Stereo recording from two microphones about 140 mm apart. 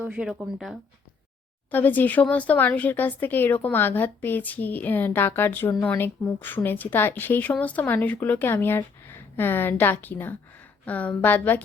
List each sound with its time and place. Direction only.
0.0 s speech: 5° right (ahead or behind)
1.7 s speech: 15° left (ahead or behind)